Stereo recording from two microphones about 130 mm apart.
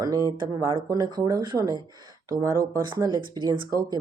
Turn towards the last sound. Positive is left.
turn(degrees=-40)  # may be behind; listen again after turning